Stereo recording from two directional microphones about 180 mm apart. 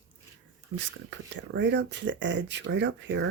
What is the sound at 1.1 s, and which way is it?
Speech, 80° right.